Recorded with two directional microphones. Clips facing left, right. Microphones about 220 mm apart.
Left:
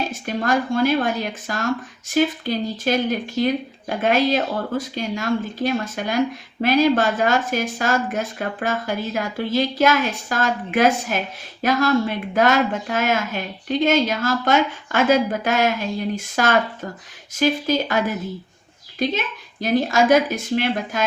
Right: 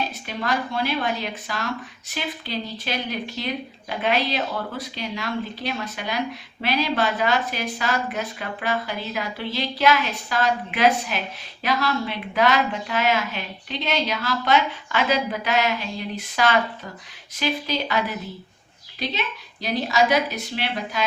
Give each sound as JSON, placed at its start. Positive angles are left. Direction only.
{"t": 0.1, "sound": "speech", "side_deg": 45}